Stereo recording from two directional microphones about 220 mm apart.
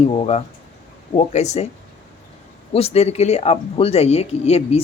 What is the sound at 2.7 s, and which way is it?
Speech, 30° left (ahead or behind).